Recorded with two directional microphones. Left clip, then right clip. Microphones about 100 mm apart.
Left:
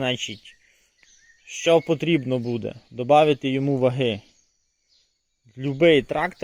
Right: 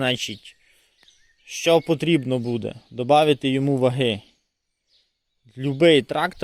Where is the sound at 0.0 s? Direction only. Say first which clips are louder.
Right 2 dB; 45° right (ahead or behind).